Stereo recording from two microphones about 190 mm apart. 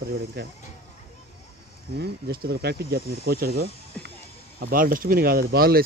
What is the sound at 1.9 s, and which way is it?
Speech, 55° right (ahead or behind).